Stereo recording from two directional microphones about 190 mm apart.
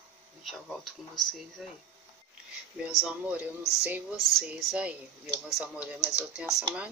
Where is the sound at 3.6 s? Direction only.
15° left (ahead or behind).